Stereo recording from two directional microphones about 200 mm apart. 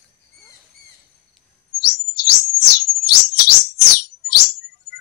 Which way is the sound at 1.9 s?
55° left (ahead or behind).